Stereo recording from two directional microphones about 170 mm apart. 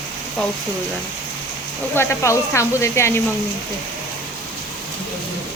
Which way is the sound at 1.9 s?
15° left (ahead or behind).